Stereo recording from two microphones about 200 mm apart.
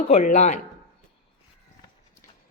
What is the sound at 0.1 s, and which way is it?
Speech, 35° left (ahead or behind).